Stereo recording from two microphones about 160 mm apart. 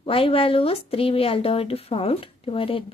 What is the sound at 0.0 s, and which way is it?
Speech, 35° left (ahead or behind).